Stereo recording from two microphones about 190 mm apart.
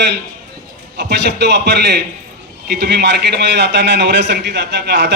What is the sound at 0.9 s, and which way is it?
A man's voice, 60° right (ahead or behind).